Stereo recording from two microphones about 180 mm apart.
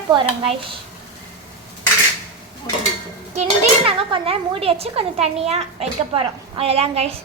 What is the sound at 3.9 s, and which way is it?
A woman's voice, 30° right (ahead or behind).